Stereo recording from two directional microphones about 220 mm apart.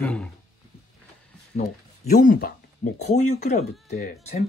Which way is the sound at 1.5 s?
30° left (ahead or behind).